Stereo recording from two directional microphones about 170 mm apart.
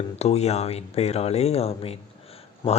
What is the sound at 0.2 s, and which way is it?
Speech, 40° left (ahead or behind).